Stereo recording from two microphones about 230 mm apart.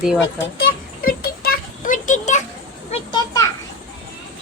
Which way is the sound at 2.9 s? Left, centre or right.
Centre.